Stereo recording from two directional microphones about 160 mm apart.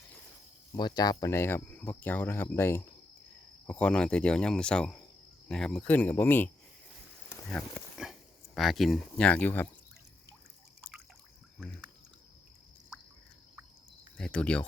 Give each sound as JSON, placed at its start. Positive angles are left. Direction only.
{"t": 0.8, "sound": "speech", "side_deg": 25}
{"t": 8.0, "sound": "dog", "side_deg": -5}
{"t": 8.5, "sound": "speech", "side_deg": 0}
{"t": 14.2, "sound": "speech", "side_deg": 5}